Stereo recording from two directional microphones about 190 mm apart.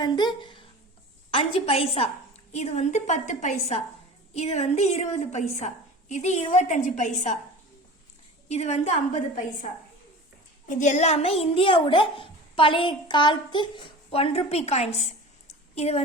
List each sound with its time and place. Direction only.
0.0 s a woman's voice: 25° left (ahead or behind); by 7.3 s 40° left (ahead or behind)
8.4 s a woman's voice: 35° left (ahead or behind)
10.7 s a child's voice: 40° left (ahead or behind)